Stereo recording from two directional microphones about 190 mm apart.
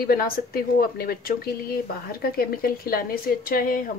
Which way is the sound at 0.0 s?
50° left (ahead or behind).